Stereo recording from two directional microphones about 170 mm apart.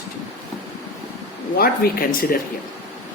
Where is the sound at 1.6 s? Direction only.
60° left (ahead or behind).